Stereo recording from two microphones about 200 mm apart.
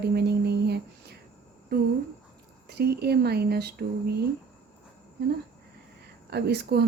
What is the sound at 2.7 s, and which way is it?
Speech, 55° right (ahead or behind).